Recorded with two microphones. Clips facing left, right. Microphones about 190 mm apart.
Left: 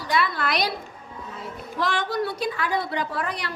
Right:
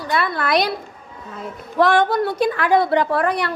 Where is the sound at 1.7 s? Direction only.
60° right (ahead or behind).